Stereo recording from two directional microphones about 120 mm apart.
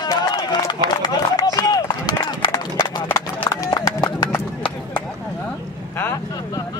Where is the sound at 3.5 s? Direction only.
30° left (ahead or behind).